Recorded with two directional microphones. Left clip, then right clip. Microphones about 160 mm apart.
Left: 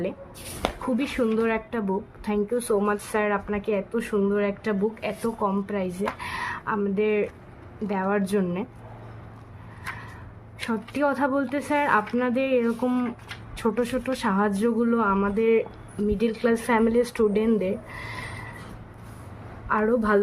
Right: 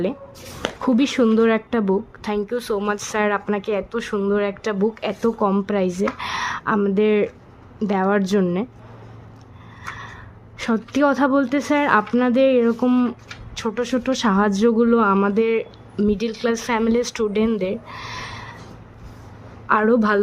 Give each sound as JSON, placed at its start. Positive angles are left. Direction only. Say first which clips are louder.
{"t": 0.8, "sound": "speech", "louder": "right 9 dB", "side_deg": -50}
{"t": 10.7, "sound": "speech", "louder": "right 6 dB", "side_deg": -45}
{"t": 19.6, "sound": "speech", "louder": "right 6 dB", "side_deg": -55}